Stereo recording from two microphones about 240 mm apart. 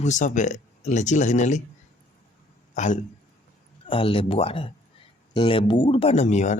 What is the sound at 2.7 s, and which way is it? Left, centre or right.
Speech, left.